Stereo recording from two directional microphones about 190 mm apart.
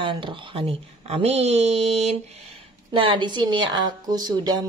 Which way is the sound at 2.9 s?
25° right (ahead or behind).